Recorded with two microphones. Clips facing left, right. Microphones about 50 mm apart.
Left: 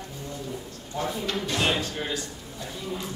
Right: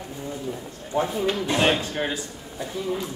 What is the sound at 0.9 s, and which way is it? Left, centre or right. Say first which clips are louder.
Speech: right 5 dB; right.